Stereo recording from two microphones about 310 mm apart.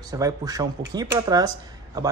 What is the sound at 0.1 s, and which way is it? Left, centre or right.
Speech, centre.